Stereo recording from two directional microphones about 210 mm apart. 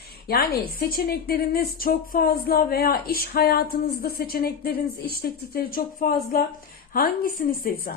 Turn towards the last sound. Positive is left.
turn(degrees=45)  # may be behind; listen again after turning